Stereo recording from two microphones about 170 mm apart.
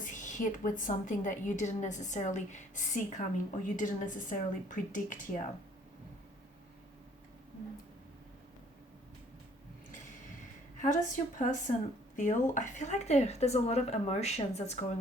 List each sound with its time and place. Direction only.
0.0 s a woman's voice: 50° left (ahead or behind)
10.8 s a woman's voice: 45° left (ahead or behind)